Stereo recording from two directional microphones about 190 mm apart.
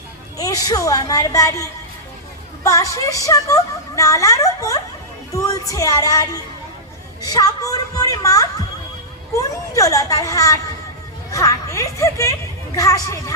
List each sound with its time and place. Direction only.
0.3 s a woman's voice: 20° left (ahead or behind)
2.6 s a woman's voice: 15° left (ahead or behind)